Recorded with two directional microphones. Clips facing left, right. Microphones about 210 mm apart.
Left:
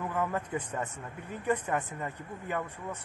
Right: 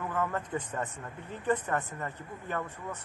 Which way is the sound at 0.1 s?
10° left (ahead or behind).